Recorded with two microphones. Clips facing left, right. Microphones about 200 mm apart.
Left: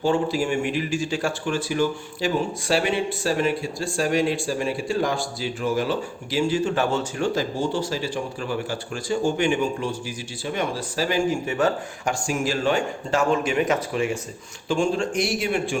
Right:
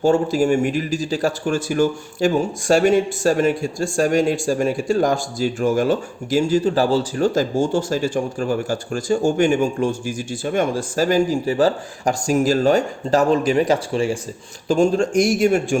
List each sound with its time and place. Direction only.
0.0 s a man's voice: 45° right (ahead or behind)
14.7 s a man's voice: 40° right (ahead or behind)